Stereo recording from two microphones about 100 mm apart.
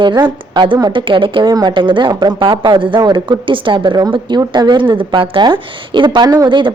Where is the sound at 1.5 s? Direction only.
45° right (ahead or behind).